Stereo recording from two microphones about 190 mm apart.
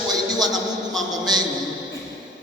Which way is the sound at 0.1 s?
20° right (ahead or behind).